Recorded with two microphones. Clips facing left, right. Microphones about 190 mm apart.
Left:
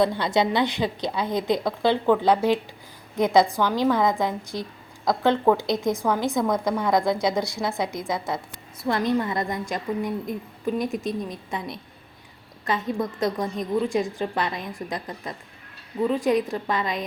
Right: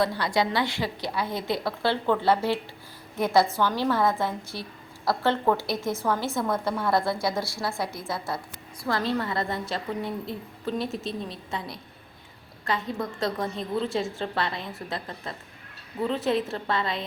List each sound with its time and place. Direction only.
0.0 s a woman's voice: 20° left (ahead or behind)